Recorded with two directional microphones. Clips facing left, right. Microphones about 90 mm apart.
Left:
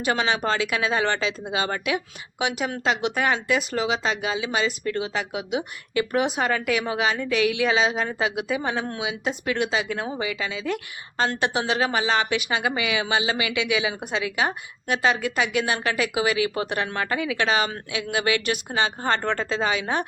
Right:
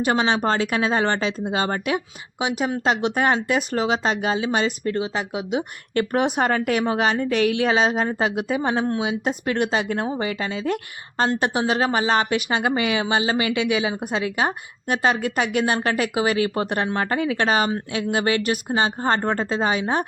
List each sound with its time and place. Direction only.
0.3 s speech: 40° right (ahead or behind)
2.4 s a woman's voice: 25° right (ahead or behind)
2.8 s speech: 40° right (ahead or behind)
5.9 s a woman's voice: 45° right (ahead or behind)